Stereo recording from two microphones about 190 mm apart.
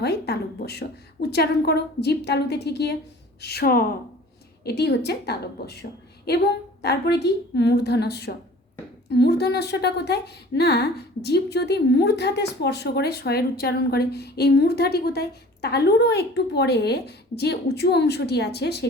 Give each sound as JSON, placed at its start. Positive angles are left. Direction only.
{"t": 0.0, "sound": "speech", "side_deg": 60}
{"t": 6.8, "sound": "speech", "side_deg": 60}